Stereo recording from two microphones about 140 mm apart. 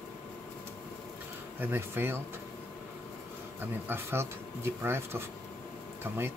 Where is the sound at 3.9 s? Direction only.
20° right (ahead or behind).